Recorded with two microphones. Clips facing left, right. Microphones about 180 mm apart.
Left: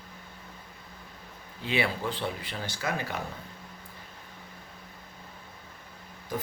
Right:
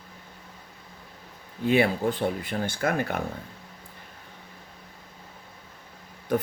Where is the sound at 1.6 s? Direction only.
50° right (ahead or behind).